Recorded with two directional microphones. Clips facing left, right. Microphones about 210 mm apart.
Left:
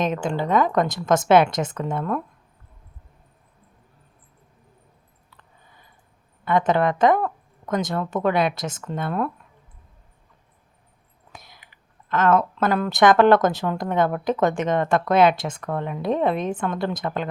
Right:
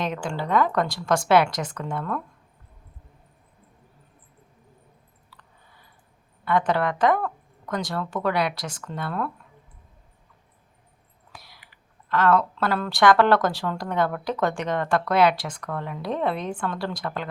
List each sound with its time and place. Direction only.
0.0 s speech: 20° left (ahead or behind)
5.4 s a sound: 20° left (ahead or behind)
6.4 s speech: 20° left (ahead or behind)
11.3 s speech: 20° left (ahead or behind)